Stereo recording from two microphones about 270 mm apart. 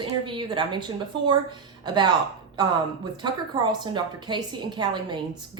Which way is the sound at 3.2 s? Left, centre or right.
Centre.